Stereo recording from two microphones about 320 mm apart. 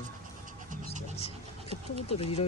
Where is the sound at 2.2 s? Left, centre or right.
Centre.